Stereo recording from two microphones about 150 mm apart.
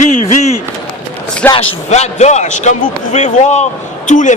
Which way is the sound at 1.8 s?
50° left (ahead or behind).